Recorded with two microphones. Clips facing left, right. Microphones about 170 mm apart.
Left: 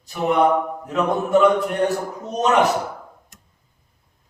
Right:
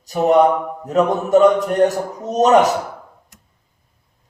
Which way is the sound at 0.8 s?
40° right (ahead or behind).